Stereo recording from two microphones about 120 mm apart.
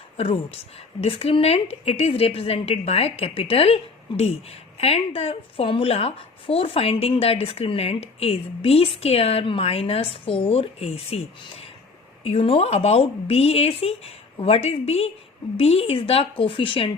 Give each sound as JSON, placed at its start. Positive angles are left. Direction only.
{"t": 0.2, "sound": "a woman's voice", "side_deg": 50}
{"t": 4.1, "sound": "speech", "side_deg": 40}
{"t": 4.8, "sound": "a woman's voice", "side_deg": 55}
{"t": 12.2, "sound": "a woman's voice", "side_deg": 55}